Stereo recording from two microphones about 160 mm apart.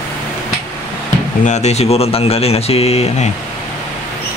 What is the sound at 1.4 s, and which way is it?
Speech, 45° left (ahead or behind).